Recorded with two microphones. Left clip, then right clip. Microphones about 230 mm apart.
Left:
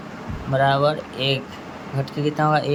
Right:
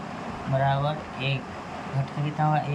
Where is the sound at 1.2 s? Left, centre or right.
Left.